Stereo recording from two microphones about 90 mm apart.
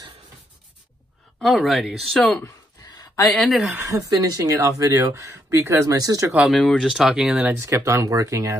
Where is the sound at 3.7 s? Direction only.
35° right (ahead or behind).